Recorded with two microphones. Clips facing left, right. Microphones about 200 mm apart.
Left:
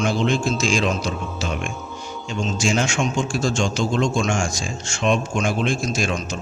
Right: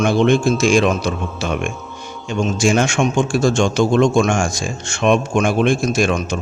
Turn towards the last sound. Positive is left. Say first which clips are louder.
# right 6 dB
turn(degrees=-60)  # may be behind; listen again after turning